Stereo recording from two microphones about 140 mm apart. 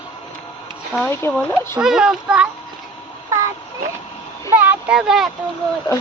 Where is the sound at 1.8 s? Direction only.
5° right (ahead or behind).